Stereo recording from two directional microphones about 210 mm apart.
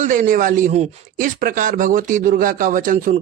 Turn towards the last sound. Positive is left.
turn(degrees=-40)  # may be behind; listen again after turning